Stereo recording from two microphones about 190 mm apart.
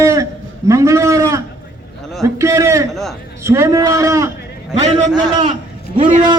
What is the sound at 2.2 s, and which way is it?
Speech, 15° right (ahead or behind).